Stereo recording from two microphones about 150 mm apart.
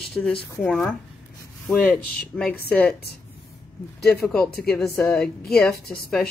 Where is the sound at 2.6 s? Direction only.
90° left.